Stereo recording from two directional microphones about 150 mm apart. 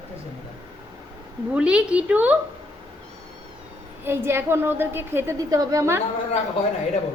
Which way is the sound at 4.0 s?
15° right (ahead or behind).